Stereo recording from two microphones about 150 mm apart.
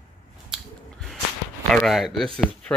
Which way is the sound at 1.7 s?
Centre (ahead or behind).